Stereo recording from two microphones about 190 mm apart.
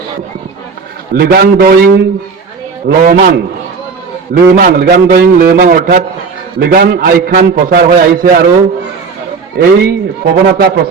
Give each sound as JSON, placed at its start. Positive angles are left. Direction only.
{"t": 1.1, "sound": "a man's voice", "side_deg": -50}
{"t": 4.5, "sound": "a man's voice", "side_deg": -50}
{"t": 9.6, "sound": "a man's voice", "side_deg": -55}